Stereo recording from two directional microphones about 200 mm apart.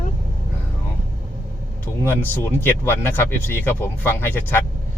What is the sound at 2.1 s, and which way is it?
Speech, 10° left (ahead or behind).